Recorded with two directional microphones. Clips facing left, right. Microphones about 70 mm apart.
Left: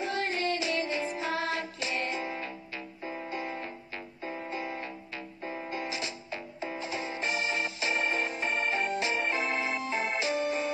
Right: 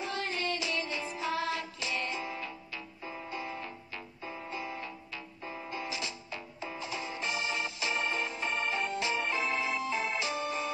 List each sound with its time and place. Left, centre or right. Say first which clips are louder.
0.0 s music: left 4 dB; left